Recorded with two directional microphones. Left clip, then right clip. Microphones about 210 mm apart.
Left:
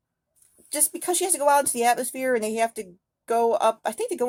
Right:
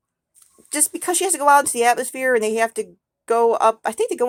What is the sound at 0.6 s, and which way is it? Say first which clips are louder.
Speech: right 4 dB; 20° right (ahead or behind).